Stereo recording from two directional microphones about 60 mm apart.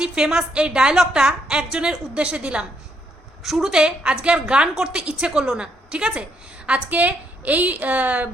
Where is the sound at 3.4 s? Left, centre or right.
Centre.